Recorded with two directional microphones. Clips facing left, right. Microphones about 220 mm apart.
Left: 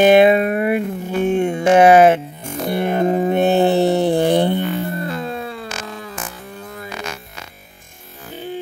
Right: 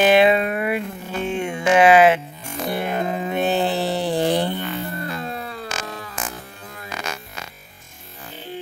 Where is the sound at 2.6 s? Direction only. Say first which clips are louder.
Left 6 dB; 55° left (ahead or behind).